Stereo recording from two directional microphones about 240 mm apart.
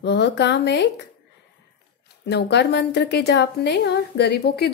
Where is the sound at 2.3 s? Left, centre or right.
Left.